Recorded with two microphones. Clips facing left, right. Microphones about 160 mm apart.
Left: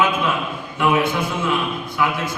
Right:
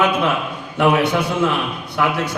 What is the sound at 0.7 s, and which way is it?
A man's voice, 70° right (ahead or behind).